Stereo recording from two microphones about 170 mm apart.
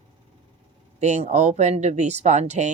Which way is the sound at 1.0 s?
45° right (ahead or behind).